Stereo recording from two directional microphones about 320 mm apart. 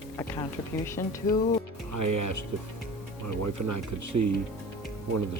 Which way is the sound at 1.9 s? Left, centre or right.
Right.